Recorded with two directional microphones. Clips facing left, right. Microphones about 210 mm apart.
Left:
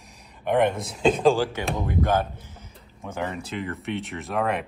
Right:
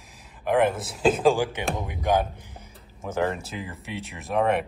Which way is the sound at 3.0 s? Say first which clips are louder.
Right 4 dB; centre (ahead or behind).